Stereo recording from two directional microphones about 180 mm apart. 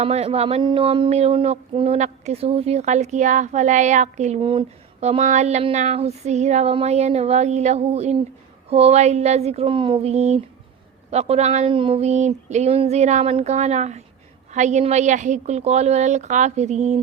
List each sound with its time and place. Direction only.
0.0 s speech: 35° right (ahead or behind)